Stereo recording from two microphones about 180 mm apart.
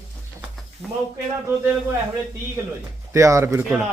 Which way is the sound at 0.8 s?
Centre (ahead or behind).